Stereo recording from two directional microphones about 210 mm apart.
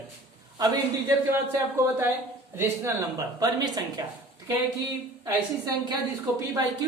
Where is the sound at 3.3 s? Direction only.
20° right (ahead or behind).